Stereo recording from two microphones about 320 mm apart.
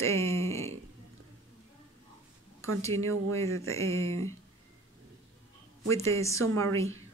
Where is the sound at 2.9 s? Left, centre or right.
Right.